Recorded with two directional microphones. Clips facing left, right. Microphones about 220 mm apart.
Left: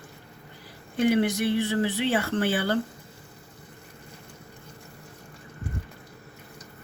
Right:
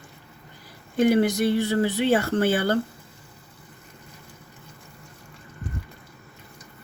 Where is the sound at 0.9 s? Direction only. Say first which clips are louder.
Right 3 dB; 40° right (ahead or behind).